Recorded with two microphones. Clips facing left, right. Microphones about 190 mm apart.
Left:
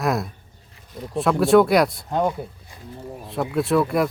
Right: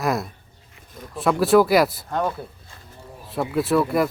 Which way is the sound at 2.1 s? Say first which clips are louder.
Left 3 dB; 15° left (ahead or behind).